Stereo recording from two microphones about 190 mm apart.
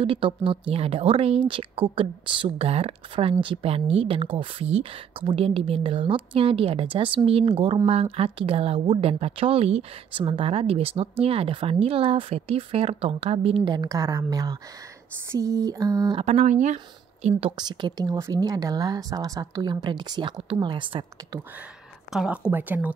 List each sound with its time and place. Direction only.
0.0 s speech: 25° right (ahead or behind)
16.3 s speech: 35° right (ahead or behind)
22.1 s speech: centre (ahead or behind)